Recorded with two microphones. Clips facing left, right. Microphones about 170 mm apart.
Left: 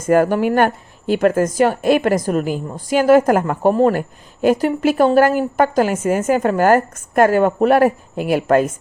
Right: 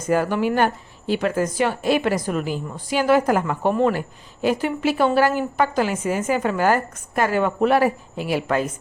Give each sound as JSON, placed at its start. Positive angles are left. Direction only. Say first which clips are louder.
{"t": 0.1, "sound": "a woman's voice", "louder": "left 6 dB", "side_deg": 50}